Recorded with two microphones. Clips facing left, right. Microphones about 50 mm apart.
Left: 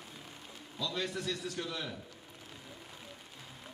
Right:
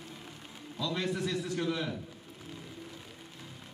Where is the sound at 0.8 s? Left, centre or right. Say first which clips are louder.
Right 4 dB; right.